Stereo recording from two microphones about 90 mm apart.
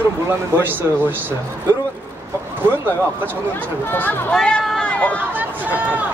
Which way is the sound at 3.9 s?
20° left (ahead or behind).